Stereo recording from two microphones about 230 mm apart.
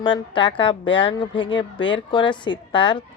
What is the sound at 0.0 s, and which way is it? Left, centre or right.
A woman's voice, left.